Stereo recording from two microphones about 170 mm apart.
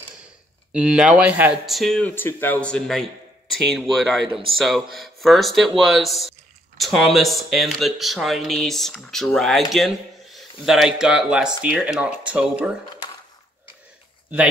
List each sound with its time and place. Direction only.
0.7 s speech: 5° right (ahead or behind)